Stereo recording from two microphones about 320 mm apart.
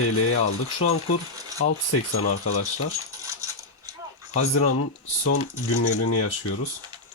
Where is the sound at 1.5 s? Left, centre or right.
Left.